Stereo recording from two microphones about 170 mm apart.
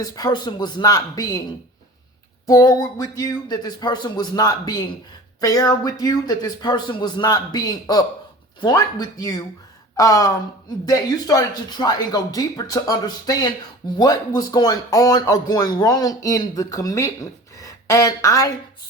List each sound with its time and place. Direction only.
0.0 s speech: 20° left (ahead or behind)
2.5 s speech: 20° left (ahead or behind)